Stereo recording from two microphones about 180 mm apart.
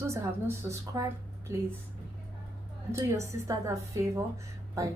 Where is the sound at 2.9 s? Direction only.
15° right (ahead or behind).